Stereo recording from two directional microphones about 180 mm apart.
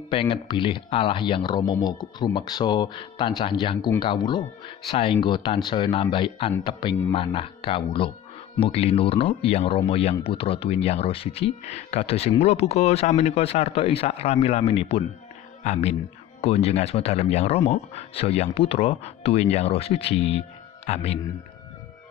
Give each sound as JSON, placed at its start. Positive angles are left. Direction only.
{"t": 0.1, "sound": "speech", "side_deg": 30}